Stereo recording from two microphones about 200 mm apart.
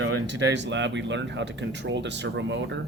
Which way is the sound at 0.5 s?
60° right (ahead or behind).